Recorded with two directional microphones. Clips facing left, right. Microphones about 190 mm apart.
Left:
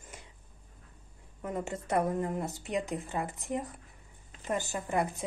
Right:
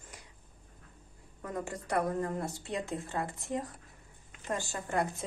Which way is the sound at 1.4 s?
20° left (ahead or behind).